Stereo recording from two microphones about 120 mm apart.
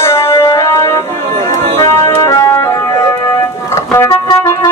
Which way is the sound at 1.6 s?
65° right (ahead or behind).